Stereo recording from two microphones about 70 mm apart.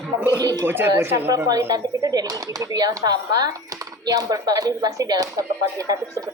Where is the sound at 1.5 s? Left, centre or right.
Right.